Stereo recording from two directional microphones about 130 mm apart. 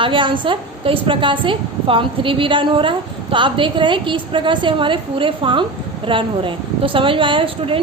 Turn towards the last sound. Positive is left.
turn(degrees=-45)  # may be behind; listen again after turning